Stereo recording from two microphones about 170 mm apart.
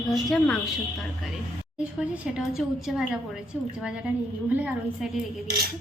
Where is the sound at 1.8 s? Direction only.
5° right (ahead or behind).